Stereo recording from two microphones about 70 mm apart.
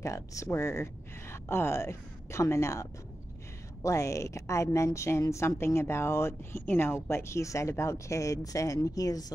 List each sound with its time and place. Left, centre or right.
0.0 s a woman's voice: left